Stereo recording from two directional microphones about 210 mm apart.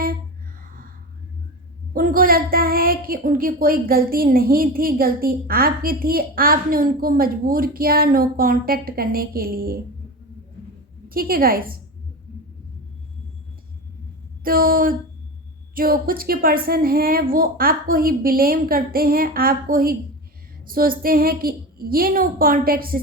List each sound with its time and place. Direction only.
1.9 s a woman's voice: 40° right (ahead or behind)
11.1 s a woman's voice: 45° right (ahead or behind)
14.4 s a woman's voice: 45° right (ahead or behind)